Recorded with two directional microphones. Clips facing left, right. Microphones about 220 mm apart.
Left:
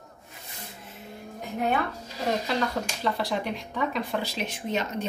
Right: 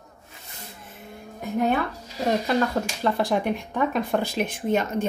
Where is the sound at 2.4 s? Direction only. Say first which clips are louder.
Right 5 dB; 50° right (ahead or behind).